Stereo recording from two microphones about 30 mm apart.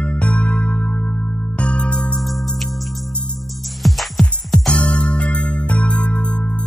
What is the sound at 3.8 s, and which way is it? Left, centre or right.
Music, centre.